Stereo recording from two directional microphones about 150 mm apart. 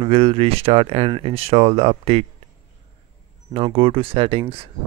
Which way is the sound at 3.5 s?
40° right (ahead or behind).